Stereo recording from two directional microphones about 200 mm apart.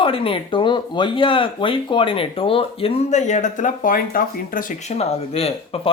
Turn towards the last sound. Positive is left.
turn(degrees=30)  # may be behind; listen again after turning